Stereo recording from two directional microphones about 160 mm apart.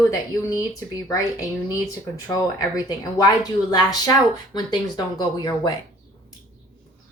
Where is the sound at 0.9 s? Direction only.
20° left (ahead or behind).